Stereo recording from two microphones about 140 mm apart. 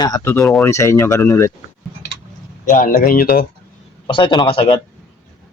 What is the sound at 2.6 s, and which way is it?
Speech, 80° left.